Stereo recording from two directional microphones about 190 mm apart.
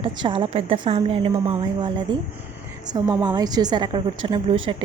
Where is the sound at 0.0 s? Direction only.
25° right (ahead or behind).